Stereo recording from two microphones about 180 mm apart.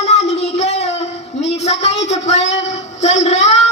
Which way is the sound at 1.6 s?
40° left (ahead or behind).